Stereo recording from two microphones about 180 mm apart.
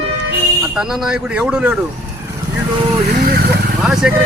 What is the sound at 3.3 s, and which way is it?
Vehicle, 60° right (ahead or behind).